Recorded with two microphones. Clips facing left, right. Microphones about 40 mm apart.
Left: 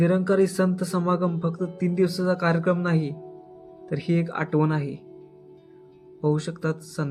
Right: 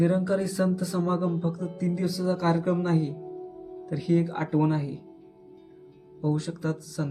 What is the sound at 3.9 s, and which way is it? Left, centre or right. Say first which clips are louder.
Speech: even; left.